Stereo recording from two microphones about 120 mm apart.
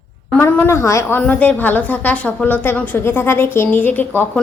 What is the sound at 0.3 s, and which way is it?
Speech, 20° left (ahead or behind).